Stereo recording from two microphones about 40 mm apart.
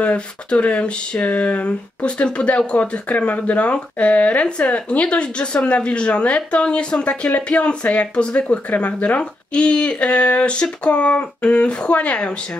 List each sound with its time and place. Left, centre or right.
0.0 s speech: left
9.2 s speech: left